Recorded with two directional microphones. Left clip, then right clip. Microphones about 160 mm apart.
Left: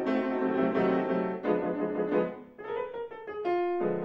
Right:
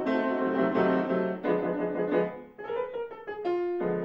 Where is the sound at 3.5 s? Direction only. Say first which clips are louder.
Left 1 dB; 20° right (ahead or behind).